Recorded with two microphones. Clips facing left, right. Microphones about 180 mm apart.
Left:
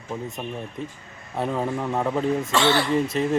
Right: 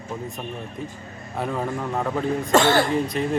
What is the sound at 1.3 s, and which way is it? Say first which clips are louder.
Speech: left 1 dB; centre (ahead or behind).